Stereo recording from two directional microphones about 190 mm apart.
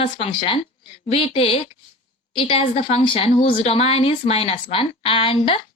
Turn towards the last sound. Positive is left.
turn(degrees=30)  # may be behind; listen again after turning